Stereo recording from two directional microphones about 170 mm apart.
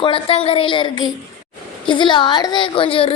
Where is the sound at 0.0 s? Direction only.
35° left (ahead or behind).